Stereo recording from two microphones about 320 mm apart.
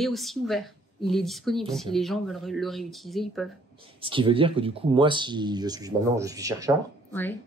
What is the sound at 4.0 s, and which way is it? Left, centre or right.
Speech, centre.